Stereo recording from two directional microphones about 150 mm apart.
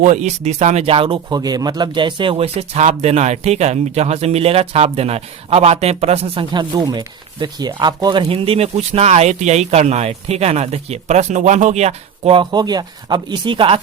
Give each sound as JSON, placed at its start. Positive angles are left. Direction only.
{"t": 0.0, "sound": "speech", "side_deg": -50}
{"t": 6.5, "sound": "speech", "side_deg": -30}
{"t": 12.4, "sound": "speech", "side_deg": -30}